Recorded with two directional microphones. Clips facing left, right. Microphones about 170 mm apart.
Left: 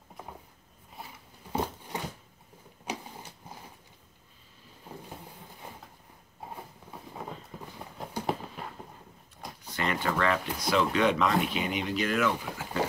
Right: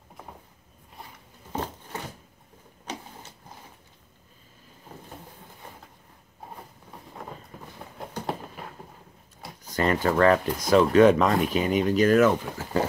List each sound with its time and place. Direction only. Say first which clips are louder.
1.5 s a sound: left 1 dB; 10° left (ahead or behind)
2.8 s vehicle: even; 10° left (ahead or behind)
9.6 s speech: right 7 dB; 40° right (ahead or behind)